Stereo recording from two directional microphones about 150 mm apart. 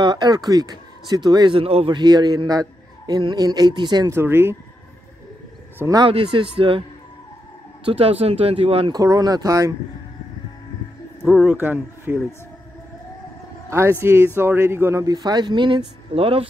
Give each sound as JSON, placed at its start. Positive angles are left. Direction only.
{"t": 0.0, "sound": "speech", "side_deg": -30}
{"t": 4.1, "sound": "speech", "side_deg": -15}
{"t": 5.8, "sound": "speech", "side_deg": -25}
{"t": 6.0, "sound": "speech", "side_deg": -35}
{"t": 7.8, "sound": "speech", "side_deg": -40}
{"t": 8.9, "sound": "speech", "side_deg": -25}
{"t": 11.4, "sound": "speech", "side_deg": -15}
{"t": 13.7, "sound": "speech", "side_deg": -15}